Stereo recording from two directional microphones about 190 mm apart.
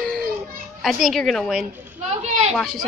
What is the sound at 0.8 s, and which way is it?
Speech, centre (ahead or behind).